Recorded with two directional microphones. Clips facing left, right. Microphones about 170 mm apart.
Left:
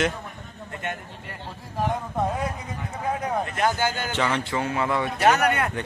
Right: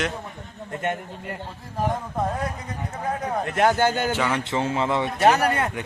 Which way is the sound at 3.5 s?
65° right (ahead or behind).